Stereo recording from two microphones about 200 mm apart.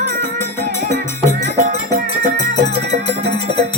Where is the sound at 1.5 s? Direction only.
45° right (ahead or behind).